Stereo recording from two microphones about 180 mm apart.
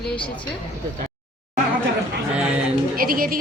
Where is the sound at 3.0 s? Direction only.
55° right (ahead or behind).